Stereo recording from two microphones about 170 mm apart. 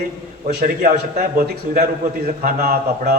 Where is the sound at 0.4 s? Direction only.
50° right (ahead or behind).